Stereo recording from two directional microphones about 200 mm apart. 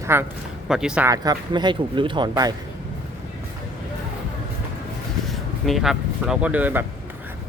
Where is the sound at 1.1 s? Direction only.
20° right (ahead or behind).